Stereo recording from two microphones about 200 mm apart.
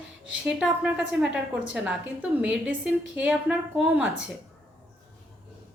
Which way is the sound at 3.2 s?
5° right (ahead or behind).